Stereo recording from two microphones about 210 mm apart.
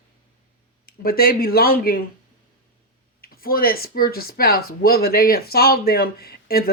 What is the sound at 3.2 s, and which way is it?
Speech, 45° left (ahead or behind).